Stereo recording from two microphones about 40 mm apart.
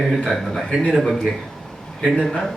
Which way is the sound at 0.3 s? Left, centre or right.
Centre.